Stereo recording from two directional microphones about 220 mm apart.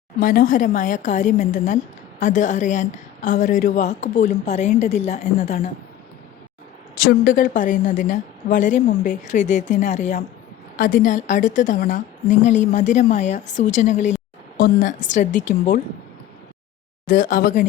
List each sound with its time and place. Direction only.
0.2 s a woman's voice: 40° left (ahead or behind)
6.9 s a woman's voice: 40° left (ahead or behind)
17.1 s a woman's voice: 40° left (ahead or behind)